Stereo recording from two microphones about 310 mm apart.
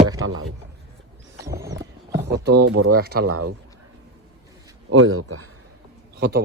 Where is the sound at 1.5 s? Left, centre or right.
Centre.